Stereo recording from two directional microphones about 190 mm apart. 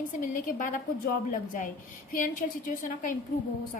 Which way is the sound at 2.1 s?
45° left (ahead or behind).